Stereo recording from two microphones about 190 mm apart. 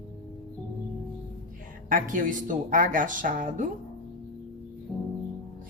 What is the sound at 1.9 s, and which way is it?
Speech, 45° right (ahead or behind).